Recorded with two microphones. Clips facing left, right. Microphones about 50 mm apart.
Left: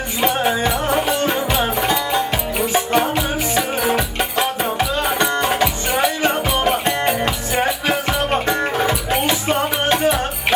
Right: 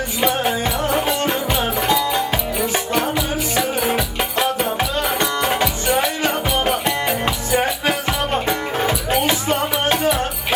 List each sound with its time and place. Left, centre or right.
0.3 s music: left
2.9 s music: left
6.8 s music: left
8.4 s music: centre